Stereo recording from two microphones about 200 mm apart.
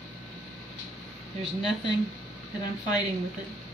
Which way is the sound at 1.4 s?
20° left (ahead or behind).